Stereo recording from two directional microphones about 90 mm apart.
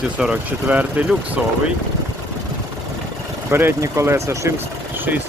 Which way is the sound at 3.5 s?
30° right (ahead or behind).